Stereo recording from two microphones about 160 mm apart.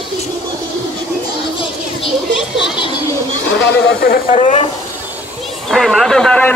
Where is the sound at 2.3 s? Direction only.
Centre (ahead or behind).